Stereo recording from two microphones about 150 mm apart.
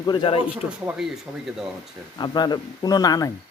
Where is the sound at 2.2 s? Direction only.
30° left (ahead or behind).